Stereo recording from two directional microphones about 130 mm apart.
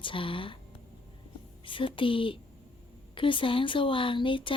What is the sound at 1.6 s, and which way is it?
Speech, 40° left (ahead or behind).